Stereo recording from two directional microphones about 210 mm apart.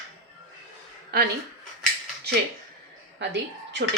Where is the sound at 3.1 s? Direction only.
55° right (ahead or behind).